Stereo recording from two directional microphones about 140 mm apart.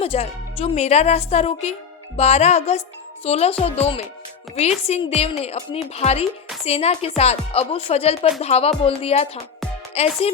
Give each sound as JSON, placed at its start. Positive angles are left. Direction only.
{"t": 0.0, "sound": "a woman's voice", "side_deg": 45}